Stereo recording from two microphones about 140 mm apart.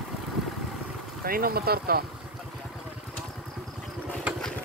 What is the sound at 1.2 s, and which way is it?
Speech, 90° right.